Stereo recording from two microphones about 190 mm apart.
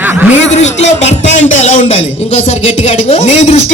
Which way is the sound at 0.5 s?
35° left (ahead or behind).